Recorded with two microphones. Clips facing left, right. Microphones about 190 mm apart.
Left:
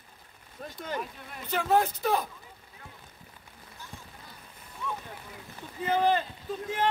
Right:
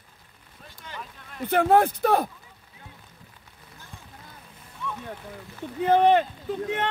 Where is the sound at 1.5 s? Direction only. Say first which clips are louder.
Right 6 dB; 55° right (ahead or behind).